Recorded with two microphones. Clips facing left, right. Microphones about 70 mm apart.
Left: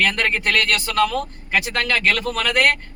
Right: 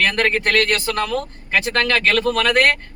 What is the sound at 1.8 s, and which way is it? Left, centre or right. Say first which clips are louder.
Speech: right 4 dB; right.